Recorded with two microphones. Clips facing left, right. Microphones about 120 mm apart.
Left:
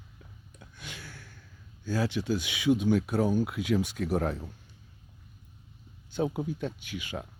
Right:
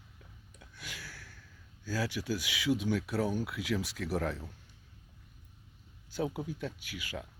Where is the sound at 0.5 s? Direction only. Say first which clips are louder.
Left 2 dB; 25° left (ahead or behind).